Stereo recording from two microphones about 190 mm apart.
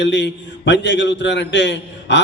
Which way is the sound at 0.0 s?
70° left (ahead or behind).